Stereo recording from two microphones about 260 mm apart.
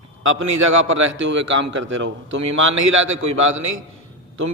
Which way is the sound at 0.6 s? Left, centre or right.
Right.